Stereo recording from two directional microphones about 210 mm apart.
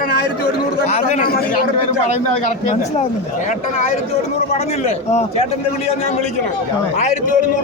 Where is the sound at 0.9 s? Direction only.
35° left (ahead or behind).